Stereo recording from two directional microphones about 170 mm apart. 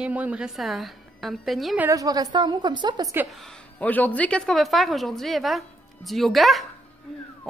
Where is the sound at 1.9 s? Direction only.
20° right (ahead or behind).